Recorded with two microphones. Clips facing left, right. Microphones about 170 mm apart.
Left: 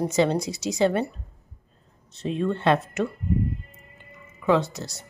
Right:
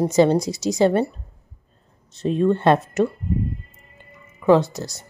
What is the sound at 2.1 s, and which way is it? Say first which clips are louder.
A woman's voice: right 7 dB; 40° right (ahead or behind).